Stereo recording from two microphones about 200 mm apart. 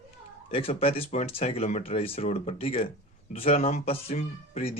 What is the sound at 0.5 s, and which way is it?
Speech, 30° left (ahead or behind).